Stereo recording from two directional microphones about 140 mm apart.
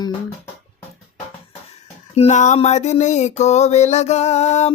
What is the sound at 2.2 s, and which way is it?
Speech, 55° left (ahead or behind).